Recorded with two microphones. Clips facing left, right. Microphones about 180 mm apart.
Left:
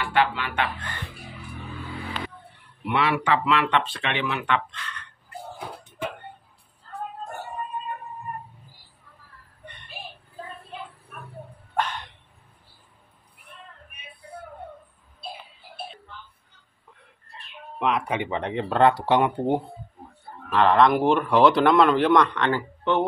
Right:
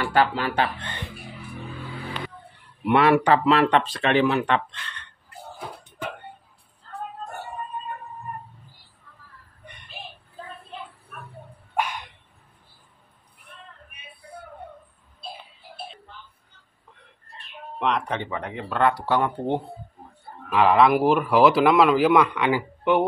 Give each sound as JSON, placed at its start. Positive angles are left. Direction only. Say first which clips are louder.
{"t": 0.0, "sound": "speech", "louder": "right 2 dB", "side_deg": -40}
{"t": 2.9, "sound": "speech", "louder": "right 5 dB", "side_deg": -45}
{"t": 11.7, "sound": "a sound", "louder": "even", "side_deg": -10}
{"t": 17.7, "sound": "speech", "louder": "left 1 dB", "side_deg": 5}
{"t": 18.3, "sound": "speech", "louder": "left 4 dB", "side_deg": 30}
{"t": 20.5, "sound": "speech", "louder": "right 1 dB", "side_deg": -5}